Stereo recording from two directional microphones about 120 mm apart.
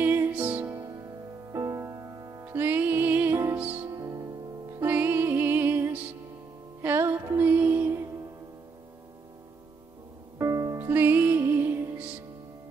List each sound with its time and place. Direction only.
0.0 s music: 15° right (ahead or behind)
0.7 s music: 30° right (ahead or behind)
2.4 s music: 15° right (ahead or behind)
3.9 s music: 30° right (ahead or behind)
10.4 s music: 25° right (ahead or behind)